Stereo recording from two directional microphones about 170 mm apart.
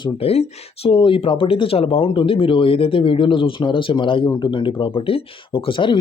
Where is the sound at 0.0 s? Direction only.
35° left (ahead or behind).